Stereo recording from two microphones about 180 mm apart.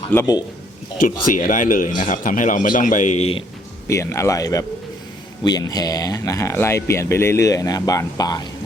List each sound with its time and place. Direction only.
0.1 s speech: 15° left (ahead or behind)
1.0 s a man's voice: 50° left (ahead or behind)
3.8 s speech: 15° left (ahead or behind)